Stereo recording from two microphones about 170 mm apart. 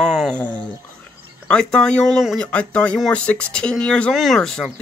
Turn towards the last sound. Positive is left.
turn(degrees=5)  # may be behind; listen again after turning